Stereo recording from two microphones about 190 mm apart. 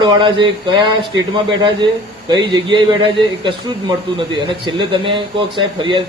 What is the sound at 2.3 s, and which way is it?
A man's voice, 25° right (ahead or behind).